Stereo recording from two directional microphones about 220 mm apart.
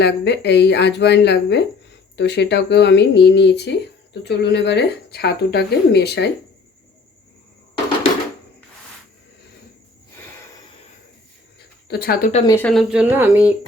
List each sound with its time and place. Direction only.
0.0 s speech: 50° left (ahead or behind)
11.9 s speech: 45° left (ahead or behind)
12.5 s speech: 5° left (ahead or behind)